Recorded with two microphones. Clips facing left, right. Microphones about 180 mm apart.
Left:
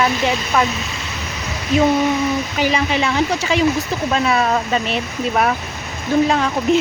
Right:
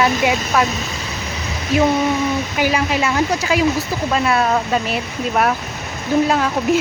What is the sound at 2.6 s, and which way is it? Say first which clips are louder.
Speech: even; 5° right (ahead or behind).